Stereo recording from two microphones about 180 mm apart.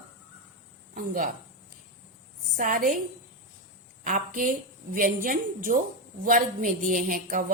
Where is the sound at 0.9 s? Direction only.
50° right (ahead or behind).